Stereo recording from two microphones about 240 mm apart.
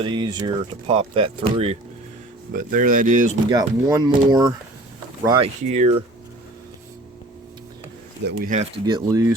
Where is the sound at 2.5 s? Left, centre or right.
Right.